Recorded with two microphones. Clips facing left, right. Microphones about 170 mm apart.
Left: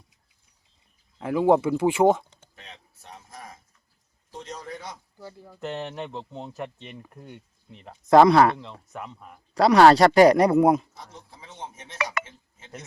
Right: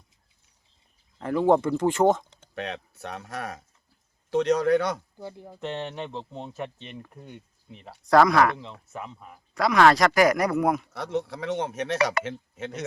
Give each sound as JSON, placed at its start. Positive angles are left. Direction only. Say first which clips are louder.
{"t": 1.2, "sound": "speech", "louder": "left 1 dB", "side_deg": 5}
{"t": 2.6, "sound": "speech", "louder": "right 16 dB", "side_deg": -70}
{"t": 5.1, "sound": "speech", "louder": "right 4 dB", "side_deg": -20}
{"t": 5.5, "sound": "speech", "louder": "left 1 dB", "side_deg": 5}
{"t": 8.1, "sound": "speech", "louder": "left 3 dB", "side_deg": 25}
{"t": 8.9, "sound": "speech", "louder": "even", "side_deg": 0}
{"t": 9.6, "sound": "speech", "louder": "left 4 dB", "side_deg": 35}
{"t": 10.9, "sound": "speech", "louder": "right 16 dB", "side_deg": -75}